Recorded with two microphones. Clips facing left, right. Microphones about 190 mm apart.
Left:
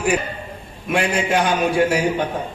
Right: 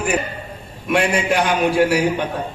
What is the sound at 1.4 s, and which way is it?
Speech, 65° right (ahead or behind).